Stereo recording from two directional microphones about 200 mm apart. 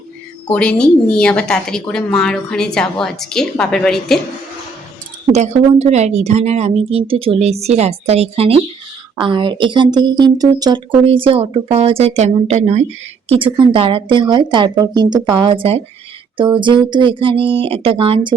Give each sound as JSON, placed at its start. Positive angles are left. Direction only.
{"t": 0.5, "sound": "a woman's voice", "side_deg": 5}
{"t": 5.3, "sound": "a woman's voice", "side_deg": -35}